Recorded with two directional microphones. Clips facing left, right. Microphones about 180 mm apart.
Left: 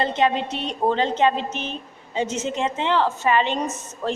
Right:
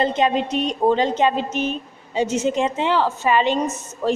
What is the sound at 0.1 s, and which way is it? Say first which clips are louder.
A woman's voice: right 2 dB; 15° right (ahead or behind).